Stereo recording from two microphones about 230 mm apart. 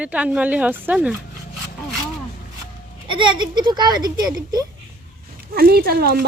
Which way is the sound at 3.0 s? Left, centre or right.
Right.